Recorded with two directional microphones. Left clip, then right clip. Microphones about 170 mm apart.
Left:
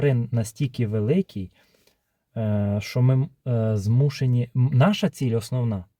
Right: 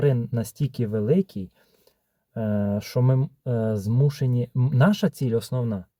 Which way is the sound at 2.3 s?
20° left (ahead or behind).